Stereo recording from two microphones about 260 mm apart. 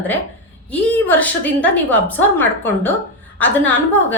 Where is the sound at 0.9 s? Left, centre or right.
Centre.